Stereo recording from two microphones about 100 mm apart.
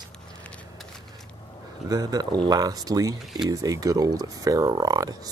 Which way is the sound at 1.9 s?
40° right (ahead or behind).